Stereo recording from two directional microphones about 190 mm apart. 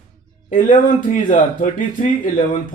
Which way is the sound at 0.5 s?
45° left (ahead or behind).